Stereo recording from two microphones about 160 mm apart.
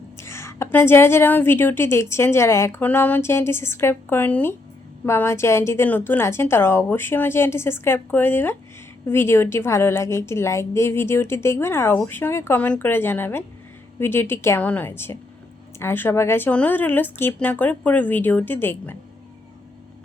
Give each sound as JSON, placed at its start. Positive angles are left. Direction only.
{"t": 0.2, "sound": "a woman's voice", "side_deg": 15}